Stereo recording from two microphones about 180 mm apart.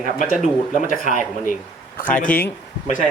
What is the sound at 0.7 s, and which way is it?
A man's voice, 45° left (ahead or behind).